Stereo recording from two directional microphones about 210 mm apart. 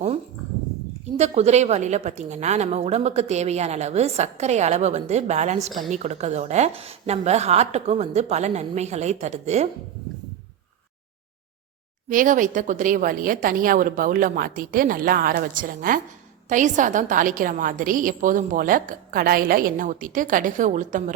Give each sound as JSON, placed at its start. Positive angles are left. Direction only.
{"t": 1.1, "sound": "speech", "side_deg": -30}
{"t": 12.0, "sound": "speech", "side_deg": -40}